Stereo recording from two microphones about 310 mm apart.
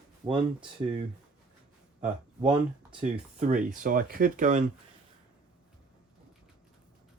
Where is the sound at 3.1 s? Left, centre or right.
Right.